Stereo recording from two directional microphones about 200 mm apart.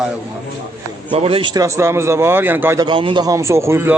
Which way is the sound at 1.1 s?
30° right (ahead or behind).